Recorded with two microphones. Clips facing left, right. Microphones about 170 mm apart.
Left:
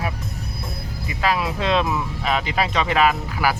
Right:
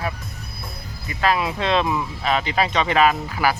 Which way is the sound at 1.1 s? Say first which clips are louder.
Right 1 dB; 5° left (ahead or behind).